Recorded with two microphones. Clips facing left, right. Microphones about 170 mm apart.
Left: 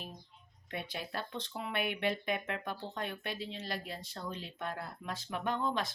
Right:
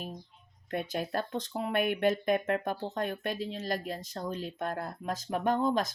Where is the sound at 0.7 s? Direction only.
45° right (ahead or behind).